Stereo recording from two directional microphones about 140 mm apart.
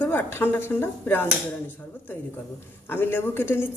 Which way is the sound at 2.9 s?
15° left (ahead or behind).